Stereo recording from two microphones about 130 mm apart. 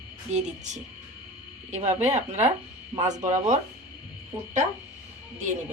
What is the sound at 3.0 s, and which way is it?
Speech, 25° right (ahead or behind).